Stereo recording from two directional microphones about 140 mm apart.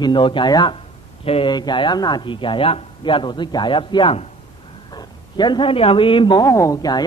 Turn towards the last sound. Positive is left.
turn(degrees=25)  # may be behind; listen again after turning